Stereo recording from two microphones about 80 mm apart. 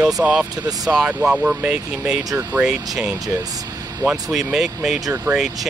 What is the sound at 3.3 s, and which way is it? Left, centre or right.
Speech, right.